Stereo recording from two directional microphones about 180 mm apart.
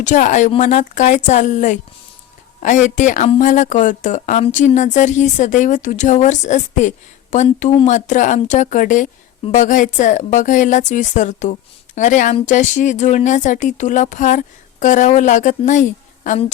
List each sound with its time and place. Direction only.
0.0 s speech: 45° left (ahead or behind)